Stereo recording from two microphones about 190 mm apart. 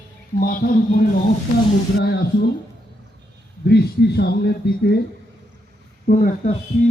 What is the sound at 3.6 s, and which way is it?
Speech, 65° left (ahead or behind).